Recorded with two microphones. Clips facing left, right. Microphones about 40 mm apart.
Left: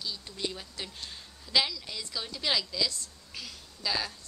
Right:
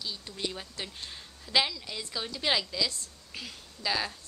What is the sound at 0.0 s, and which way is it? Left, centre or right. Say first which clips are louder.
A woman's voice: even; centre.